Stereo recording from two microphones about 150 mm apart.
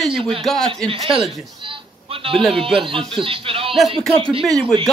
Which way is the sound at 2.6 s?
35° right (ahead or behind).